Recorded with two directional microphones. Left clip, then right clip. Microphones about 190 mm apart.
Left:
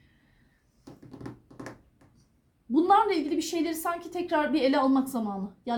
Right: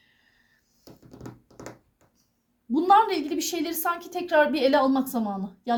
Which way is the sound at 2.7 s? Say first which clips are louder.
Right 3 dB; 45° right (ahead or behind).